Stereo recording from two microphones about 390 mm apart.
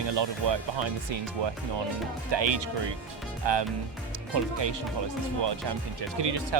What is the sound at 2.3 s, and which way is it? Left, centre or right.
Speech, right.